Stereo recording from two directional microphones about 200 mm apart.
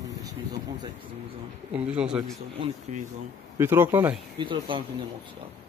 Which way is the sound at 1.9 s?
5° right (ahead or behind).